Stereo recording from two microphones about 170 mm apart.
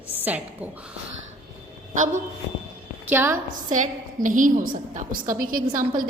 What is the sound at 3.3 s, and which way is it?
A woman's voice, 50° right (ahead or behind).